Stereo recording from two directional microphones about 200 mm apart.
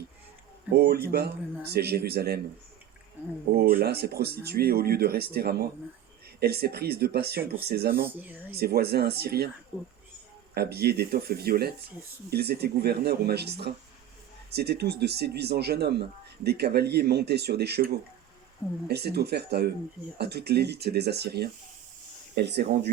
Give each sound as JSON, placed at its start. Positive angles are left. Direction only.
{"t": 0.7, "sound": "speech", "side_deg": -50}
{"t": 3.5, "sound": "speech", "side_deg": -50}
{"t": 8.0, "sound": "speech", "side_deg": -10}
{"t": 8.5, "sound": "speech", "side_deg": -50}
{"t": 10.5, "sound": "speech", "side_deg": -50}